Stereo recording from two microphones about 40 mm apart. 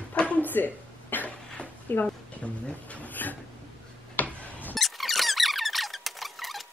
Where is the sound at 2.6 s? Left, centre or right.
Left.